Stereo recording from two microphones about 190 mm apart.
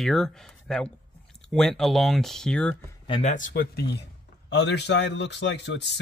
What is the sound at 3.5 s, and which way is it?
A man's voice, 60° left (ahead or behind).